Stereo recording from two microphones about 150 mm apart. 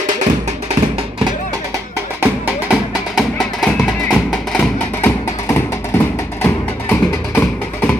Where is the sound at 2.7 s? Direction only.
Centre (ahead or behind).